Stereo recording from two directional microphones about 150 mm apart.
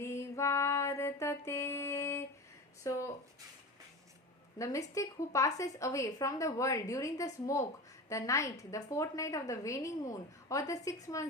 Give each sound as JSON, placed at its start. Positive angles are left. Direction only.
{"t": 0.0, "sound": "female singing", "side_deg": 20}
{"t": 2.8, "sound": "a woman's voice", "side_deg": 20}
{"t": 4.5, "sound": "a woman's voice", "side_deg": 20}